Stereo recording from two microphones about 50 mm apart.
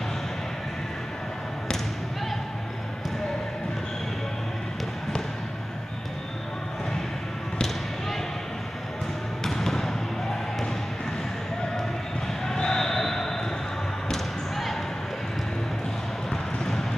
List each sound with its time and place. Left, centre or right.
9.4 s basketball bounce: centre
12.4 s basketball bounce: centre